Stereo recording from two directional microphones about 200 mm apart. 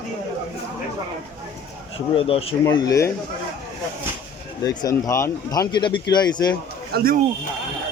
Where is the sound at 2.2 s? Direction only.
30° left (ahead or behind).